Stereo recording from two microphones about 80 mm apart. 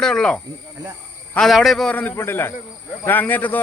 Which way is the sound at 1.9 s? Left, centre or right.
Centre.